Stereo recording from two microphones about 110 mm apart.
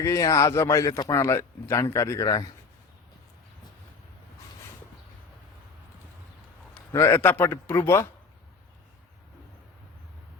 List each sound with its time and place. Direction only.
0.0 s speech: 30° left (ahead or behind)
6.9 s speech: 25° left (ahead or behind)